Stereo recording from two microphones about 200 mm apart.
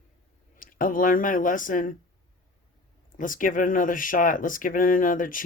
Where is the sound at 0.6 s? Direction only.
45° left (ahead or behind).